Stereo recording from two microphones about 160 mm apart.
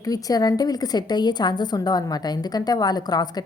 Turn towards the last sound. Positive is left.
turn(degrees=25)  # may be behind; listen again after turning